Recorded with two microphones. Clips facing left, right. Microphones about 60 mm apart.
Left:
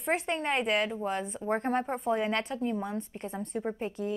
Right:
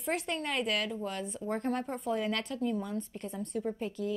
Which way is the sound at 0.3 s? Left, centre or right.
Left.